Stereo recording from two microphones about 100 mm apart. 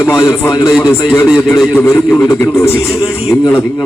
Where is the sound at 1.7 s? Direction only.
25° left (ahead or behind).